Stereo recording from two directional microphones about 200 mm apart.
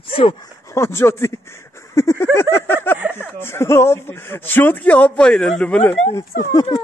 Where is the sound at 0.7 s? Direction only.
15° left (ahead or behind).